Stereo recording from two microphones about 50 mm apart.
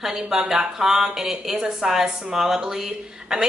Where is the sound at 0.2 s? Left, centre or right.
Centre.